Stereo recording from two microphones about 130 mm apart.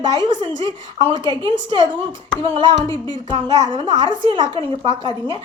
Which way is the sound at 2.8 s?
30° left (ahead or behind).